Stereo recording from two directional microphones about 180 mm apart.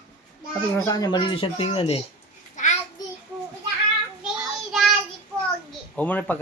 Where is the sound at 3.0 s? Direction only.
20° left (ahead or behind).